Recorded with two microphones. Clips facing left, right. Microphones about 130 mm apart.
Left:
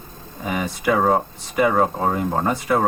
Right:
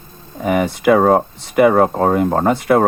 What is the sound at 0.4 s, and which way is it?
Speech, 65° right (ahead or behind).